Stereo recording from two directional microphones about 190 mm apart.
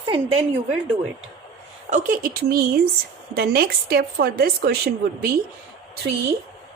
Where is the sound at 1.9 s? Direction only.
45° right (ahead or behind).